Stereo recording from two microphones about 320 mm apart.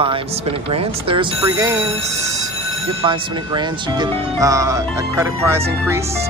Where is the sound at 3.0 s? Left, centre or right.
Centre.